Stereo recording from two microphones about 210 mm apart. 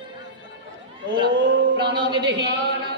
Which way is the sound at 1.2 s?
55° right (ahead or behind).